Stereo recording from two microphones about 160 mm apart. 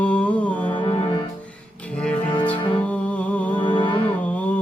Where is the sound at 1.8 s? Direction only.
10° left (ahead or behind).